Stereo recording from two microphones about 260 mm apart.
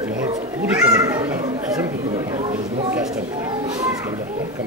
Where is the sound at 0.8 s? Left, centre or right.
Centre.